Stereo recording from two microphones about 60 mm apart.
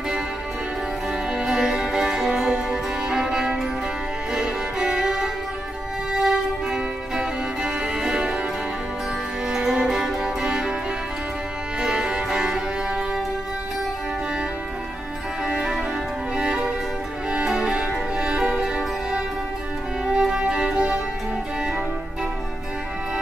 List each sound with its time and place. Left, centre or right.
1.3 s music: centre
9.5 s music: centre
11.8 s music: centre
15.4 s music: centre